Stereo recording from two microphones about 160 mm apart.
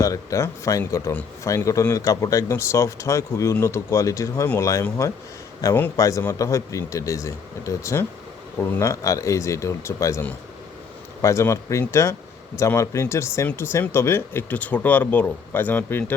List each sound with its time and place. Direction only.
0.0 s speech: 20° left (ahead or behind)